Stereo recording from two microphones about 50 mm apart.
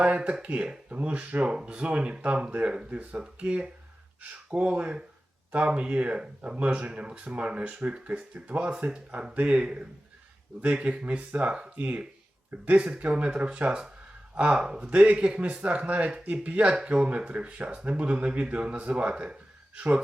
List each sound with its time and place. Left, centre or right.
0.0 s speech: right
3.2 s speech: right
8.9 s speech: centre